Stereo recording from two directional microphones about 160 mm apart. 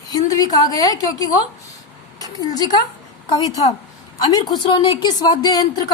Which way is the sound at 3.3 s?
25° left (ahead or behind).